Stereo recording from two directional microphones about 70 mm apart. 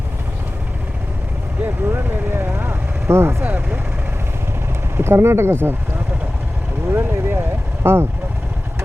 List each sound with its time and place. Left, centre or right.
1.6 s speech: right
4.9 s speech: right
6.8 s vehicle: right
7.8 s speech: right